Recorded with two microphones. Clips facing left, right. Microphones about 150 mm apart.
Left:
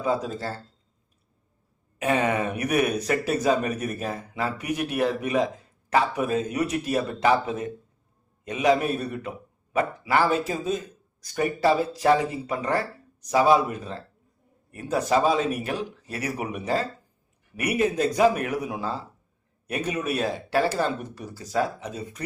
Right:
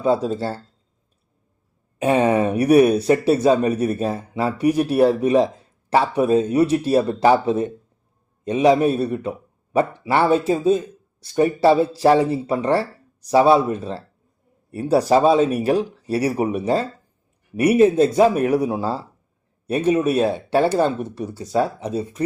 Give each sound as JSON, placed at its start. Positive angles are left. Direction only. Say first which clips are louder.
{"t": 0.0, "sound": "speech", "louder": "right 7 dB", "side_deg": -30}
{"t": 2.0, "sound": "speech", "louder": "right 7 dB", "side_deg": -30}